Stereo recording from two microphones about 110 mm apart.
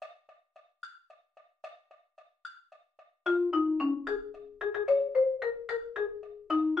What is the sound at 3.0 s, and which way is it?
Marimba, centre (ahead or behind).